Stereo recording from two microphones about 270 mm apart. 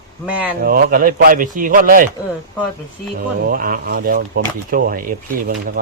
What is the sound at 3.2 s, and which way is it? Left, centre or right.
Speech, right.